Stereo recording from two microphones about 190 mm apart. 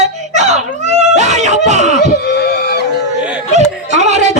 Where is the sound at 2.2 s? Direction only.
55° left (ahead or behind).